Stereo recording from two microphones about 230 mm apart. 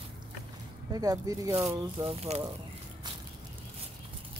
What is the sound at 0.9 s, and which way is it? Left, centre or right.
Speech, centre.